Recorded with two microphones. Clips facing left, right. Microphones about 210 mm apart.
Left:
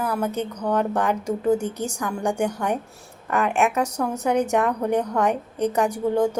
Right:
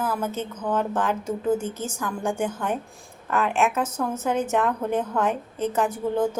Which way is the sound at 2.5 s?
15° left (ahead or behind).